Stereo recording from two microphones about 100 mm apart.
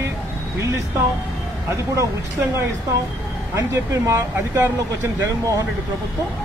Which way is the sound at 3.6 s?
30° right (ahead or behind).